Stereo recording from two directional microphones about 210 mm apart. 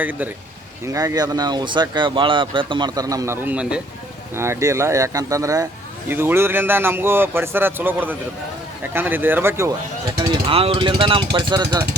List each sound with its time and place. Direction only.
0.0 s speech: 10° right (ahead or behind)